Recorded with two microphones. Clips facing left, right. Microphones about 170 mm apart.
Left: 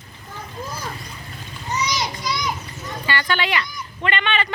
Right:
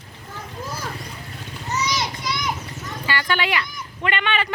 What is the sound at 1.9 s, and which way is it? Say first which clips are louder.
Children playing: left 1 dB; 25° right (ahead or behind).